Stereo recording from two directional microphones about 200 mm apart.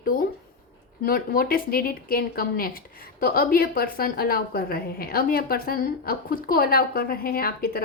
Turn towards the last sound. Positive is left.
turn(degrees=50)  # may be behind; listen again after turning